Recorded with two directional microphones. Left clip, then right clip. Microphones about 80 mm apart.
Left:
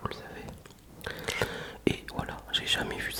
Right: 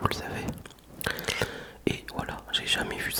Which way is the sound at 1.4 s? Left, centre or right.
Centre.